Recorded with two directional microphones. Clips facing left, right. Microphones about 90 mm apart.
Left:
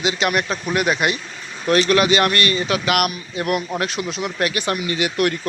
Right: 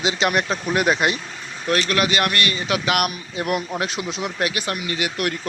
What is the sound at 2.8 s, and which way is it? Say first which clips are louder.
Speech: left 2 dB; 20° right (ahead or behind).